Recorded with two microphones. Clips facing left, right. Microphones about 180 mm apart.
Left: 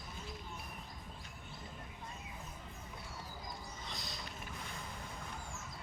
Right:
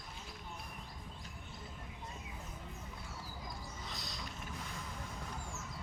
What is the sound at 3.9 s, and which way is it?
Mechanisms, centre (ahead or behind).